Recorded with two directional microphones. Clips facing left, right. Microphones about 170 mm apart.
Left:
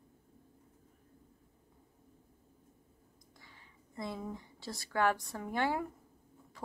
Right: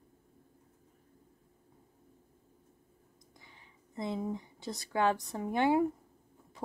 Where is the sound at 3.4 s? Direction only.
20° right (ahead or behind).